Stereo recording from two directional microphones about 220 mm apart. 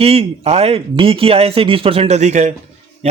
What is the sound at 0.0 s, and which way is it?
Speech, 25° right (ahead or behind).